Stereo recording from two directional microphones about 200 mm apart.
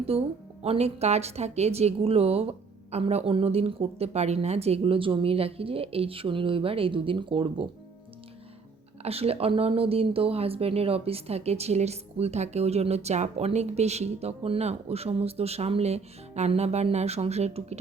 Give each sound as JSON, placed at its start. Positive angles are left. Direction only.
{"t": 0.1, "sound": "a woman's voice", "side_deg": -30}
{"t": 9.0, "sound": "speech", "side_deg": -30}